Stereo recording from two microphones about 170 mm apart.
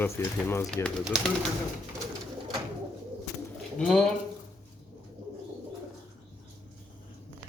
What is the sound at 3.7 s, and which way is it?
Speech, 5° left (ahead or behind).